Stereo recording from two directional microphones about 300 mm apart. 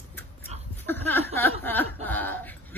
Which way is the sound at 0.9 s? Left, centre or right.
Centre.